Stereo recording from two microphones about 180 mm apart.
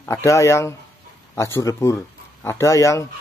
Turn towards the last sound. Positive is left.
turn(degrees=15)  # may be behind; listen again after turning